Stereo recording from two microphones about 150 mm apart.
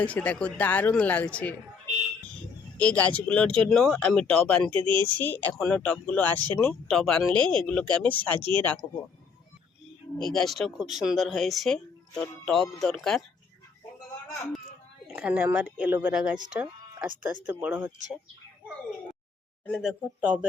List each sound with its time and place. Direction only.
0.0 s speech: 10° left (ahead or behind)
2.7 s speech: 10° left (ahead or behind)
4.7 s speech: 35° right (ahead or behind)
5.0 s speech: 10° left (ahead or behind)
8.4 s speech: 35° right (ahead or behind)
8.8 s speech: 10° left (ahead or behind)
10.2 s speech: centre (ahead or behind)
15.1 s speech: 10° right (ahead or behind)
16.5 s music: 10° right (ahead or behind)
17.4 s speech: 10° right (ahead or behind)
19.8 s speech: 5° right (ahead or behind)